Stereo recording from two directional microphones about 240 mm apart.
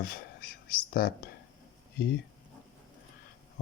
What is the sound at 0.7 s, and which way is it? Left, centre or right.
Speech, left.